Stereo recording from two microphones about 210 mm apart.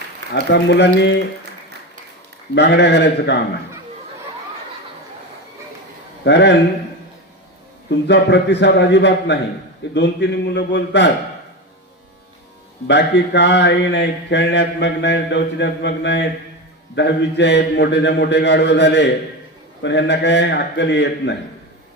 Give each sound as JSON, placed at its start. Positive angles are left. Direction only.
{"t": 0.3, "sound": "mantra", "side_deg": 55}
{"t": 2.6, "sound": "mantra", "side_deg": 55}
{"t": 6.2, "sound": "mantra", "side_deg": 55}
{"t": 7.9, "sound": "mantra", "side_deg": 55}
{"t": 12.9, "sound": "mantra", "side_deg": 55}